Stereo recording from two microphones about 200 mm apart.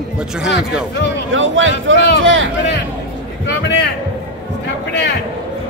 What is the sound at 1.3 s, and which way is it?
Speech, 70° right (ahead or behind).